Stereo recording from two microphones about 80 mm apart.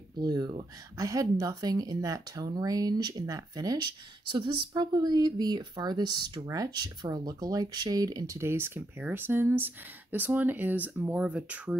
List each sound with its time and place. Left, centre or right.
0.2 s speech: right
0.9 s speech: right
3.8 s speech: right
6.4 s speech: right
6.7 s speech: right
7.1 s speech: right
8.4 s speech: right